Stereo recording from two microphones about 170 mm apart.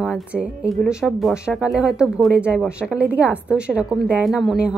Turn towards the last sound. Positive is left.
turn(degrees=0)  # may be behind; listen again after turning